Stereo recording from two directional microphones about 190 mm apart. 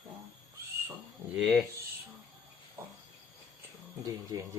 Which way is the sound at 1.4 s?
Centre (ahead or behind).